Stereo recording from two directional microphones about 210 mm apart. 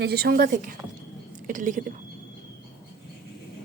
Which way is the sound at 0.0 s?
50° right (ahead or behind).